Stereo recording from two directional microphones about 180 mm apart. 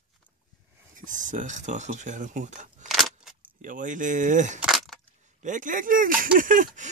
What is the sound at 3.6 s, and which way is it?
Speech, 45° right (ahead or behind).